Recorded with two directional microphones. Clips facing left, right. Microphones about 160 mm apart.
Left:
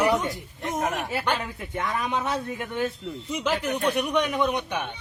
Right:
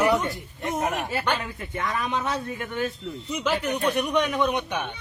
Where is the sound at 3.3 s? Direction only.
10° left (ahead or behind).